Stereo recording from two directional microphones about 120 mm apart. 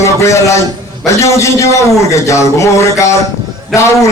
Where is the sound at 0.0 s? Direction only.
25° left (ahead or behind).